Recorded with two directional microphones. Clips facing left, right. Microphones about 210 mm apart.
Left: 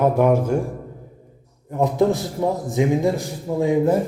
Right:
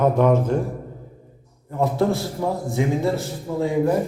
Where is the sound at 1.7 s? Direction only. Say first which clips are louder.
Left 2 dB; 20° left (ahead or behind).